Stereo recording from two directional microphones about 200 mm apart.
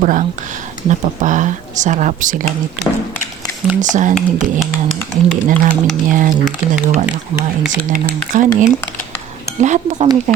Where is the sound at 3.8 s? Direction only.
40° right (ahead or behind).